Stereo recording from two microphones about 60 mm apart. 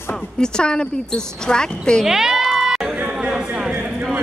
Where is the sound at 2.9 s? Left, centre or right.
Centre.